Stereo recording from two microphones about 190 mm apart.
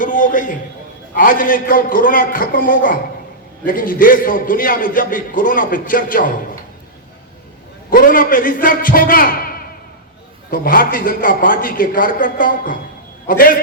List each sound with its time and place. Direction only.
0.0 s a sound: 45° left (ahead or behind)
1.1 s a man's voice: 45° left (ahead or behind)
7.9 s a man's voice: 45° left (ahead or behind)